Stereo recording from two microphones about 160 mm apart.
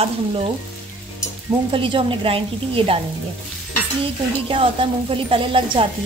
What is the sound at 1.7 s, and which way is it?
Speech, 35° right (ahead or behind).